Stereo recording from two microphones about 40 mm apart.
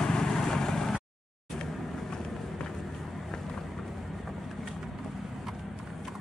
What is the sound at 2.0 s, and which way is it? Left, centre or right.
Run, centre.